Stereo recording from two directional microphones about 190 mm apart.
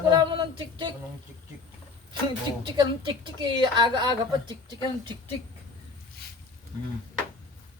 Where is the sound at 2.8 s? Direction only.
25° right (ahead or behind).